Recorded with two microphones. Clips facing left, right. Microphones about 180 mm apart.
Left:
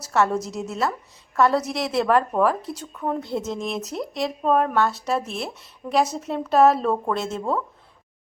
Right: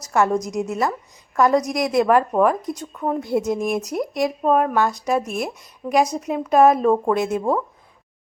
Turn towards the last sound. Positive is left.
turn(degrees=-15)  # may be behind; listen again after turning